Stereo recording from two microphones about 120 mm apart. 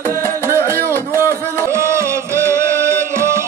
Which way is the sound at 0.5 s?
20° right (ahead or behind).